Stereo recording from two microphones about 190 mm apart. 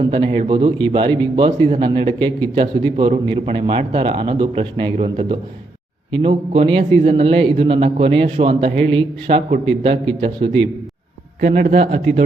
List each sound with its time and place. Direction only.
0.0 s a man's voice: 30° right (ahead or behind)